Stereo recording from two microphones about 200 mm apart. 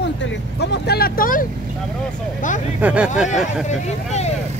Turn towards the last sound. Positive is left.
turn(degrees=35)  # may be behind; listen again after turning